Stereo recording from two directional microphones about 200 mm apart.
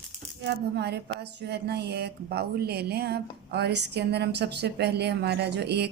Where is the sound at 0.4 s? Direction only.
60° right (ahead or behind).